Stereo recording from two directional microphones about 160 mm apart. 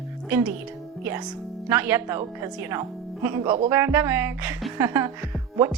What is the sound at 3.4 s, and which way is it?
Speech, 35° right (ahead or behind).